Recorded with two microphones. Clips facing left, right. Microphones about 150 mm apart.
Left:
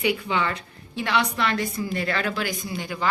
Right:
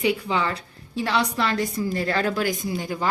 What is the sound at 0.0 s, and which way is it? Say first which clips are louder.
A woman's voice: right 1 dB; 35° right (ahead or behind).